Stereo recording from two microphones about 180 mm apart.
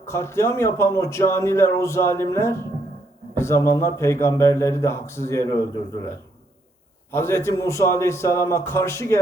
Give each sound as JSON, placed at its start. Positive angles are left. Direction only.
{"t": 0.0, "sound": "a man's voice", "side_deg": 15}
{"t": 7.1, "sound": "a man's voice", "side_deg": 15}